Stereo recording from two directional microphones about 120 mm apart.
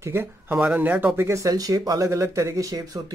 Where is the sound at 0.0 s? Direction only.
20° right (ahead or behind).